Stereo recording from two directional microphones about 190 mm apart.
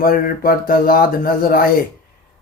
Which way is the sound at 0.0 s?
50° left (ahead or behind).